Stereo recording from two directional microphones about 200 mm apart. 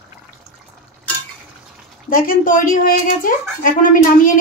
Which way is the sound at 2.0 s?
45° left (ahead or behind).